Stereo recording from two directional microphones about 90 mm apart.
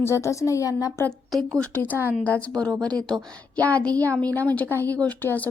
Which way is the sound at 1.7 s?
20° left (ahead or behind).